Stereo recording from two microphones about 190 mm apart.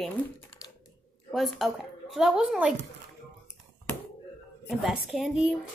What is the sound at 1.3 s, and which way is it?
A woman's voice, centre (ahead or behind).